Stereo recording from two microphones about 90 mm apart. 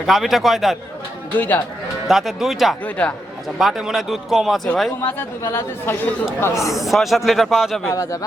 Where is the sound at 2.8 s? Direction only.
15° left (ahead or behind).